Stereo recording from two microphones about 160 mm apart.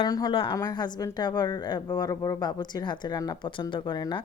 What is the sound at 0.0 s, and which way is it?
Speech, 25° left (ahead or behind).